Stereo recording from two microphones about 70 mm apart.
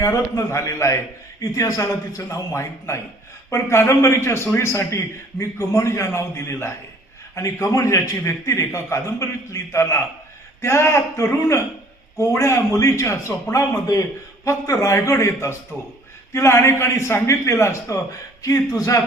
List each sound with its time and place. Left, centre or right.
0.0 s a man's voice: left
2.5 s a man's voice: left